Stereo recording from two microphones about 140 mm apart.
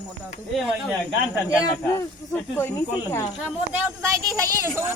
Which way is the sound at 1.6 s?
25° left (ahead or behind).